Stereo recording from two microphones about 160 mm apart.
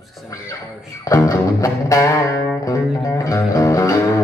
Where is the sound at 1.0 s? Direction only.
20° left (ahead or behind).